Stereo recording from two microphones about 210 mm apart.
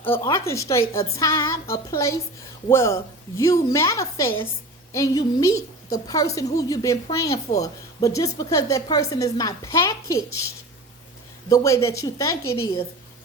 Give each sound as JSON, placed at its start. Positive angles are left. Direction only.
{"t": 0.0, "sound": "a woman's voice", "side_deg": 15}
{"t": 11.4, "sound": "a woman's voice", "side_deg": 15}